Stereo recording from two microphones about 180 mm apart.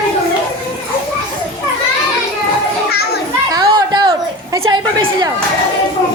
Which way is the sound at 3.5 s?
25° right (ahead or behind).